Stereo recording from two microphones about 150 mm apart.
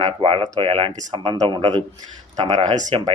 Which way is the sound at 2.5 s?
50° right (ahead or behind).